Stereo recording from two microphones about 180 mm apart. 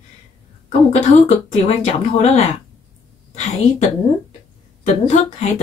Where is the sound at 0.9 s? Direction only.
40° left (ahead or behind).